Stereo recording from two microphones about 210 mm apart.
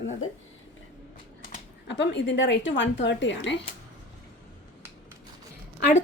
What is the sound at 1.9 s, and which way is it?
Speech, 55° left (ahead or behind).